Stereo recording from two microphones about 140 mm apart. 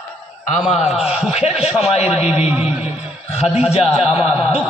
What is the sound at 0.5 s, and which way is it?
Speech, 55° left (ahead or behind).